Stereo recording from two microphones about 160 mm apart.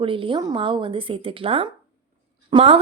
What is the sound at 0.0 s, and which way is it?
A woman's voice, 35° right (ahead or behind).